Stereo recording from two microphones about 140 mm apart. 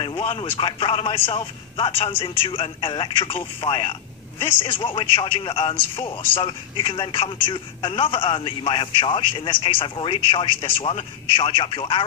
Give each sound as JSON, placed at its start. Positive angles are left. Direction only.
{"t": 0.0, "sound": "speech", "side_deg": 40}